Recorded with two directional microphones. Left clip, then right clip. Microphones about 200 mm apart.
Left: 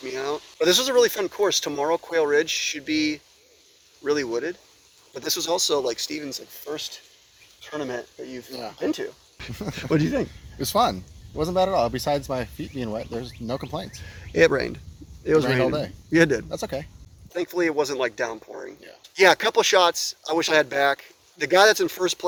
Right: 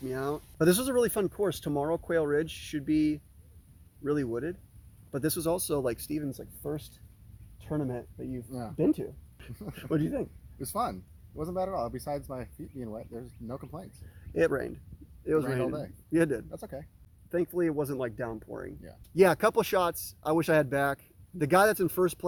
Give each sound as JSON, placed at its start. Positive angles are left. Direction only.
{"t": 0.0, "sound": "speech", "side_deg": -5}
{"t": 8.4, "sound": "speech", "side_deg": 15}
{"t": 8.8, "sound": "speech", "side_deg": 0}
{"t": 10.6, "sound": "speech", "side_deg": 15}
{"t": 14.3, "sound": "speech", "side_deg": -10}
{"t": 16.5, "sound": "speech", "side_deg": 15}
{"t": 17.3, "sound": "speech", "side_deg": -5}